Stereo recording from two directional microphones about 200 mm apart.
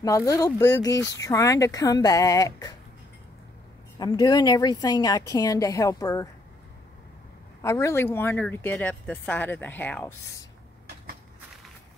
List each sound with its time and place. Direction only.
0.0 s speech: 15° left (ahead or behind)
4.0 s speech: 20° left (ahead or behind)
7.6 s speech: 15° left (ahead or behind)